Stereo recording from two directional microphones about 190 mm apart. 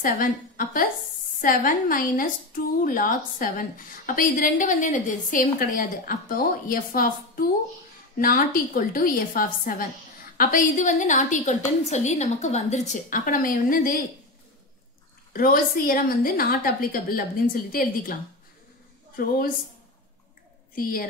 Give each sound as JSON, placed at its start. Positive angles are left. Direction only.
{"t": 0.0, "sound": "a woman's voice", "side_deg": 45}
{"t": 15.3, "sound": "a woman's voice", "side_deg": 50}